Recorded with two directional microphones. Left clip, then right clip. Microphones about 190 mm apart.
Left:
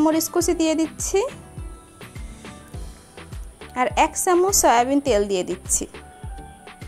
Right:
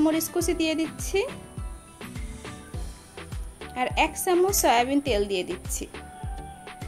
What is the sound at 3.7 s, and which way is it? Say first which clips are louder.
A woman's voice: left 5 dB; 30° left (ahead or behind).